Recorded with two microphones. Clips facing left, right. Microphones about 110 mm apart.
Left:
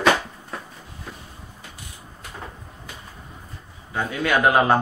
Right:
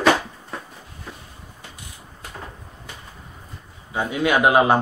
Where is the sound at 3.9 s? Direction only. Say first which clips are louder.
Right 2 dB; 15° right (ahead or behind).